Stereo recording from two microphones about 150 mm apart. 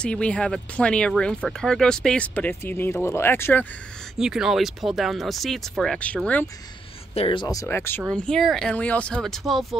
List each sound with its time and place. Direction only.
0.0 s speech: 5° left (ahead or behind)
4.2 s speech: 5° right (ahead or behind)
7.2 s speech: 35° left (ahead or behind); by 8.0 s 15° left (ahead or behind)
8.1 s speech: 5° left (ahead or behind)